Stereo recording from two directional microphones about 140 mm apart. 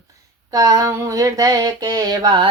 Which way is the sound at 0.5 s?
25° right (ahead or behind).